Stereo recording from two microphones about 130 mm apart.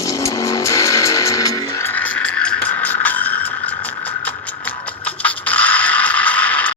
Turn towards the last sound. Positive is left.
turn(degrees=10)  # may be behind; listen again after turning